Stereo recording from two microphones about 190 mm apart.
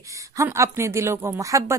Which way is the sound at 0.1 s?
15° right (ahead or behind).